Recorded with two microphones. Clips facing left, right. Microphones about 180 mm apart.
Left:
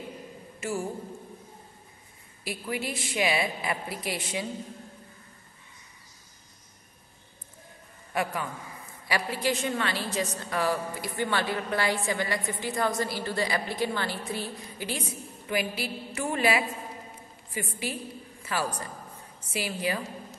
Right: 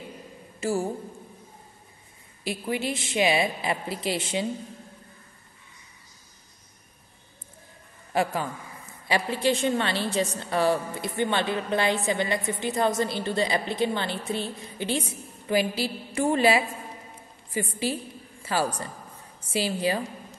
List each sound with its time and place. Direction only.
0.6 s a woman's voice: 30° right (ahead or behind)
2.4 s a woman's voice: 25° right (ahead or behind)
8.1 s a man's voice: 30° right (ahead or behind)